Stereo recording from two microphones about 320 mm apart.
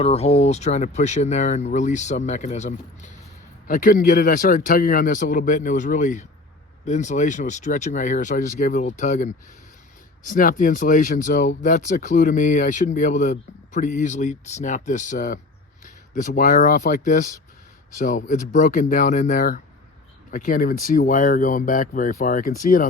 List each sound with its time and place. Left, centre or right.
0.0 s speech: centre